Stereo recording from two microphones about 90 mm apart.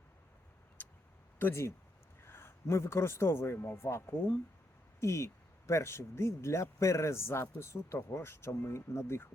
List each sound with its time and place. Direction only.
0.8 s vehicle: 25° left (ahead or behind)
1.4 s speech: 25° left (ahead or behind)